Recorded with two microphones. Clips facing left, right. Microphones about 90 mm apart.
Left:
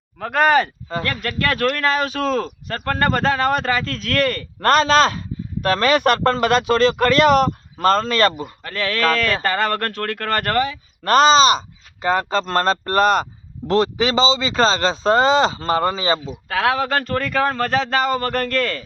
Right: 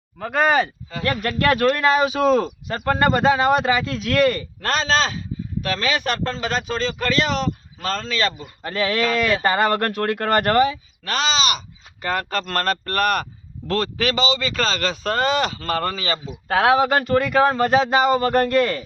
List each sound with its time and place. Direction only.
0.2 s speech: centre (ahead or behind)
1.0 s speech: 20° right (ahead or behind)
1.6 s speech: 5° right (ahead or behind)
4.6 s speech: 55° left (ahead or behind)
8.6 s speech: 15° right (ahead or behind)
11.0 s speech: 45° left (ahead or behind)
12.0 s a man's voice: 20° left (ahead or behind)
16.5 s speech: 20° right (ahead or behind)